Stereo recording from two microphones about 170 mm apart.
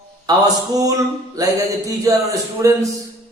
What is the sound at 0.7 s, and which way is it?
Speech, 20° right (ahead or behind).